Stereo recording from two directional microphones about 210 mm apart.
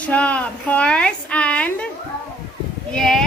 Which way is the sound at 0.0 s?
5° left (ahead or behind).